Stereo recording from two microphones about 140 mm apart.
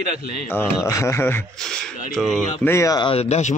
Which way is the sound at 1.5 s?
5° left (ahead or behind).